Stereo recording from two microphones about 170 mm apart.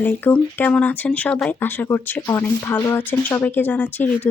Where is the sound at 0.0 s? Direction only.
10° left (ahead or behind).